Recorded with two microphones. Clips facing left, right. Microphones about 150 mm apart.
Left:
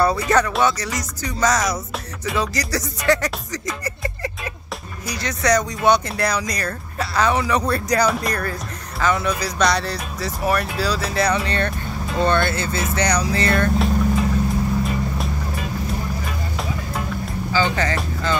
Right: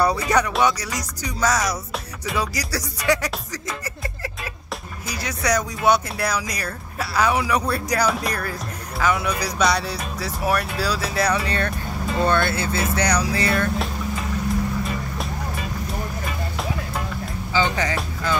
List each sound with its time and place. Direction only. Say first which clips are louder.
0.0 s speech: left 2 dB; 15° right (ahead or behind)
16.3 s vehicle: even; centre (ahead or behind)
17.5 s speech: left 1 dB; 15° right (ahead or behind)
17.9 s speech: left 2 dB; 5° right (ahead or behind)